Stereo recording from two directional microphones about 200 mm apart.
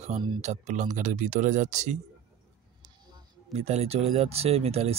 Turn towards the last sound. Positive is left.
turn(degrees=-30)  # may be behind; listen again after turning